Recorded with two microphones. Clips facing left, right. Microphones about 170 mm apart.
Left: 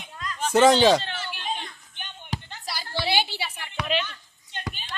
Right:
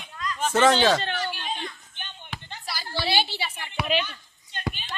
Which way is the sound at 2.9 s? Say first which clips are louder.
Even; 15° left (ahead or behind).